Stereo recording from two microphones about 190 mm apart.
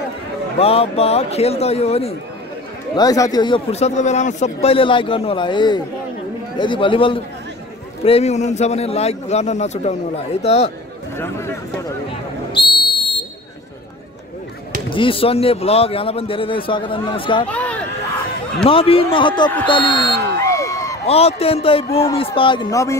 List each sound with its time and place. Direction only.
0.6 s a man's voice: 30° left (ahead or behind)
3.0 s a man's voice: 20° left (ahead or behind)
11.1 s speech: 15° left (ahead or behind)
12.1 s buzzer: 25° left (ahead or behind)
15.0 s speech: 30° left (ahead or behind)
17.5 s a sound: 5° left (ahead or behind)
18.6 s speech: 30° left (ahead or behind)
19.9 s a sound: 25° left (ahead or behind)
21.1 s a man's voice: 30° left (ahead or behind); by 22.9 s 15° left (ahead or behind)